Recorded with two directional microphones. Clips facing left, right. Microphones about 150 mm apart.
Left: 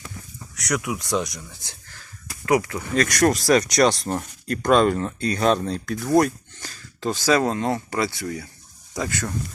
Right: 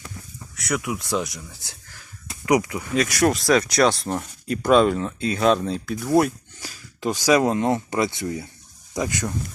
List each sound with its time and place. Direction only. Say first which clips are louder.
0.5 s speech: even; centre (ahead or behind)
2.2 s a sound: right 1 dB; 20° right (ahead or behind)
2.7 s speech: left 1 dB; 5° right (ahead or behind)